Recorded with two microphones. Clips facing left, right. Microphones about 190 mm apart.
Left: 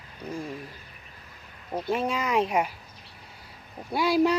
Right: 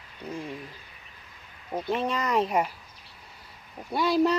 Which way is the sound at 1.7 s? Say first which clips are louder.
Left 1 dB; centre (ahead or behind).